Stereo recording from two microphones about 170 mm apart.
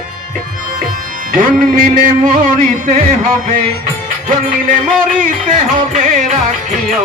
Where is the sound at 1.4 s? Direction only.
50° right (ahead or behind).